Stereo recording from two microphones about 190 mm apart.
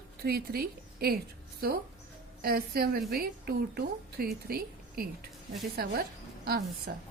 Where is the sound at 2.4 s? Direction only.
50° right (ahead or behind).